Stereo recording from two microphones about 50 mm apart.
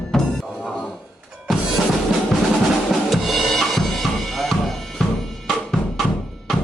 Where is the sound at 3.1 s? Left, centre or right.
Centre.